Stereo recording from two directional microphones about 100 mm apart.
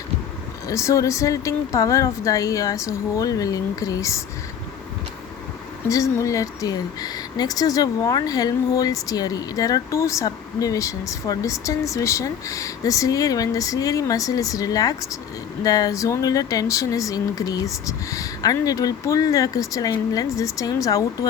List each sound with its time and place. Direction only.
0.7 s speech: 30° left (ahead or behind)
5.9 s speech: 35° left (ahead or behind)